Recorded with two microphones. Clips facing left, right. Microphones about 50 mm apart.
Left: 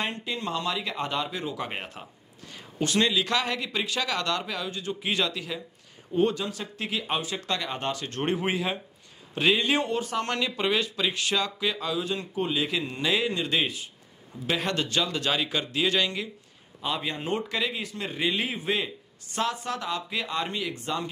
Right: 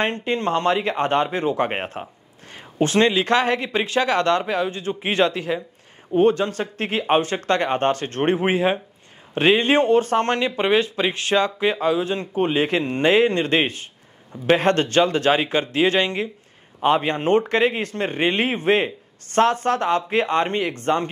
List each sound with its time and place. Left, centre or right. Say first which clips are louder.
0.0 s a man's voice: right 9 dB; right
16.8 s a man's voice: right 12 dB; right